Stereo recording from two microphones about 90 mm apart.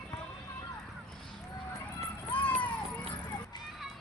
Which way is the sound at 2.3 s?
20° left (ahead or behind).